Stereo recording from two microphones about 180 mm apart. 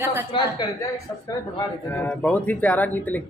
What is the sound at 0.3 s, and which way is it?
Speech, 25° left (ahead or behind).